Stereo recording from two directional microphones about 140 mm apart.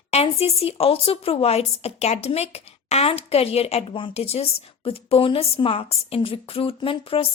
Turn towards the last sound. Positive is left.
turn(degrees=40)  # may be behind; listen again after turning